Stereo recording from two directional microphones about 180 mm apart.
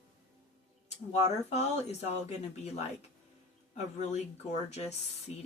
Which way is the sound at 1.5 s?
40° left (ahead or behind).